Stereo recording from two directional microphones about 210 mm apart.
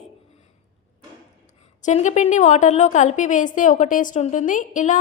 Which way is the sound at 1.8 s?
35° left (ahead or behind).